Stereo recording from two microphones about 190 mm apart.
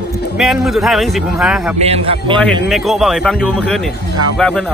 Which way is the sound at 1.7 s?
30° right (ahead or behind).